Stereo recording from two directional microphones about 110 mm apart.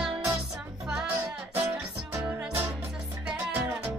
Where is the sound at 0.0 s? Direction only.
5° right (ahead or behind).